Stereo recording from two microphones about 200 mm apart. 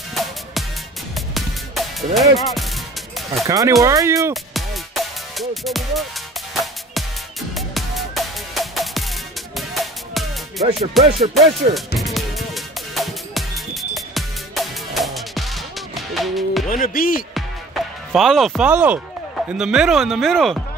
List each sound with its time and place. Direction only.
0.1 s music: centre (ahead or behind)
2.1 s speech: centre (ahead or behind)
3.4 s speech: 15° right (ahead or behind)
4.3 s music: centre (ahead or behind)
11.0 s speech: centre (ahead or behind)
12.0 s music: centre (ahead or behind)
16.6 s speech: 40° left (ahead or behind)
17.3 s music: centre (ahead or behind)
19.5 s speech: 5° right (ahead or behind)